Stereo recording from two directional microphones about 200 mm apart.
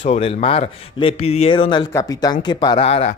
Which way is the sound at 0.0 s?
30° left (ahead or behind).